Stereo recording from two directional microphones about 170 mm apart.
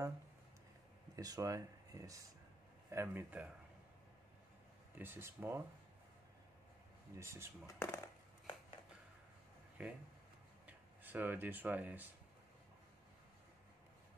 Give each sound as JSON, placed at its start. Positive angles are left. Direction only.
{"t": 1.1, "sound": "speech", "side_deg": -20}
{"t": 4.9, "sound": "speech", "side_deg": -10}
{"t": 7.2, "sound": "speech", "side_deg": -15}
{"t": 7.6, "sound": "speech", "side_deg": 15}
{"t": 9.8, "sound": "speech", "side_deg": -10}